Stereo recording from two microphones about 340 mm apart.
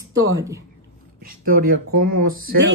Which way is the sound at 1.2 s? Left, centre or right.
Right.